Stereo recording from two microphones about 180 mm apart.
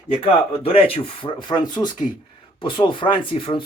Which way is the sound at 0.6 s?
30° left (ahead or behind).